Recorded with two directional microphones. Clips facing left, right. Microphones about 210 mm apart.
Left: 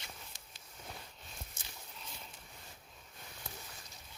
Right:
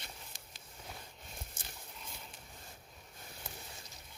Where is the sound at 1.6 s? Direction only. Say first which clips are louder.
Right 3 dB; 55° right (ahead or behind).